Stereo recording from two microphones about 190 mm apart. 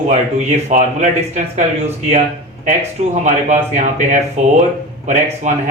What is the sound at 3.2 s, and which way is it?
A man's voice, 40° right (ahead or behind).